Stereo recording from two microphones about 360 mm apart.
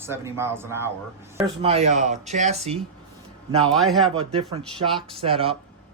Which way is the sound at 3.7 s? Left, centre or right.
Centre.